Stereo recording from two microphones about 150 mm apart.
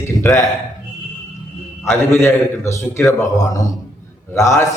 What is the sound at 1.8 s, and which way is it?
A man's voice, 15° left (ahead or behind).